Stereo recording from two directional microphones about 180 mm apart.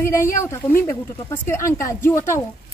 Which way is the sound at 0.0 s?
15° left (ahead or behind).